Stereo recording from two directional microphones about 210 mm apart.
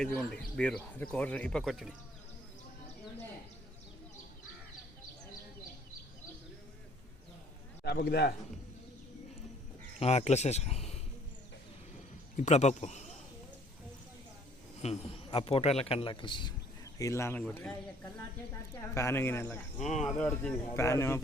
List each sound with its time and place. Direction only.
0.0 s speech: 5° left (ahead or behind)
7.9 s a man's voice: 50° left (ahead or behind)
10.0 s speech: 30° left (ahead or behind)
12.4 s speech: 35° left (ahead or behind)
14.8 s a man's voice: 30° left (ahead or behind); by 17.7 s 10° left (ahead or behind)
18.9 s speech: 10° left (ahead or behind)